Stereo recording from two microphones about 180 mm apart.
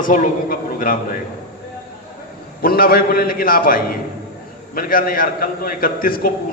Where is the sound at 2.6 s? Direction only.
55° left (ahead or behind).